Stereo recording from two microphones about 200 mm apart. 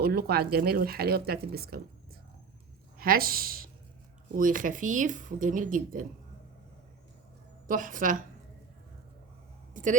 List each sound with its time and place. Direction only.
0.0 s speech: 50° right (ahead or behind)
3.0 s speech: 45° right (ahead or behind)
7.7 s speech: 40° right (ahead or behind)
9.7 s speech: 40° right (ahead or behind)